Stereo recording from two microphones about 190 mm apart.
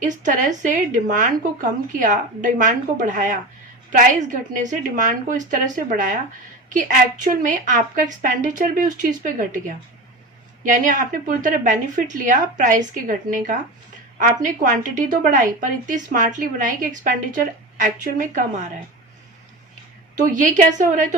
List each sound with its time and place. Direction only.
0.0 s a woman's voice: 40° right (ahead or behind)
20.2 s a woman's voice: 40° right (ahead or behind)